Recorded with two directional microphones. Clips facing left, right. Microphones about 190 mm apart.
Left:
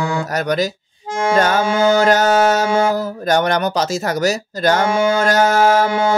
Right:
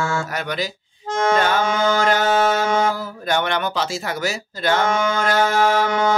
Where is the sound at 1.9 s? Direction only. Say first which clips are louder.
Left 5 dB; 40° left (ahead or behind).